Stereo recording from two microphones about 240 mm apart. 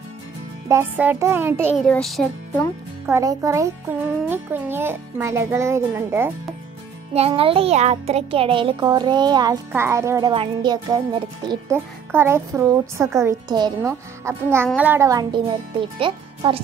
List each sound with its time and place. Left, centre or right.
0.7 s a child's voice: centre
1.9 s a child's voice: centre
3.1 s a child's voice: centre
7.2 s a child's voice: right